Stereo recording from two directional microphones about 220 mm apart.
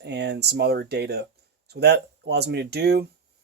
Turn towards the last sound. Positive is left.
turn(degrees=-50)  # may be behind; listen again after turning